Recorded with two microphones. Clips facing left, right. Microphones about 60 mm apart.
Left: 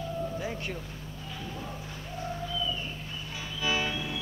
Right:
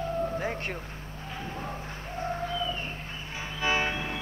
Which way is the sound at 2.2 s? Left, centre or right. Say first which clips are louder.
Right 3 dB; right.